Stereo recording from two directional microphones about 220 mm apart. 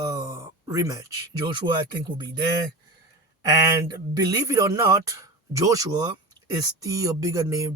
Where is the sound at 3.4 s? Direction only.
15° right (ahead or behind).